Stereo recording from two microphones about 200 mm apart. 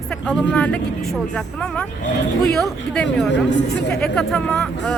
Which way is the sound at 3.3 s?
65° left (ahead or behind).